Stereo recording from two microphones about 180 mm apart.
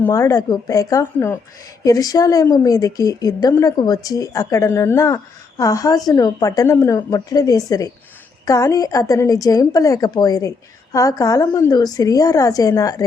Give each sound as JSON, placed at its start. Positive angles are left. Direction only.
{"t": 0.0, "sound": "a woman's voice", "side_deg": 15}